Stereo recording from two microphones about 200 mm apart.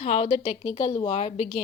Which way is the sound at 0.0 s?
30° left (ahead or behind).